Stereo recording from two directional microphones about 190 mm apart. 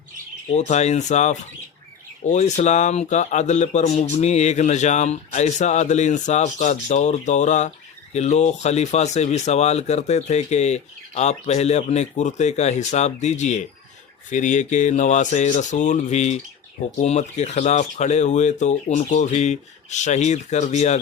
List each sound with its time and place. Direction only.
0.5 s speech: 35° left (ahead or behind)